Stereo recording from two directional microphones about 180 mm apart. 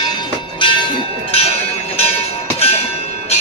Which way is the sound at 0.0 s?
25° left (ahead or behind).